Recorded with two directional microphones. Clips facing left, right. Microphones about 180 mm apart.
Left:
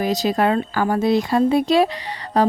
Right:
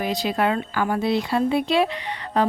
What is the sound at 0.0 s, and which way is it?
A woman's voice, 40° left (ahead or behind).